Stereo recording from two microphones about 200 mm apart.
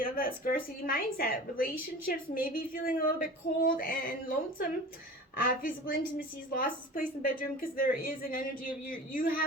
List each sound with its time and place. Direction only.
0.0 s a woman's voice: 45° left (ahead or behind)
5.4 s a woman's voice: 45° left (ahead or behind)